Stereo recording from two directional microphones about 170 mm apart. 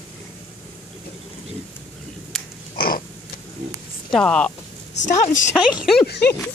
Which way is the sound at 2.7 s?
60° left (ahead or behind).